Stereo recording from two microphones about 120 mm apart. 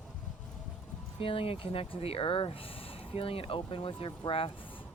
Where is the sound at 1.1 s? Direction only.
50° left (ahead or behind).